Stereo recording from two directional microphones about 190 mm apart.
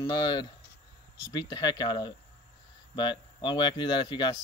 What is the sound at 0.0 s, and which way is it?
Speech, 20° left (ahead or behind).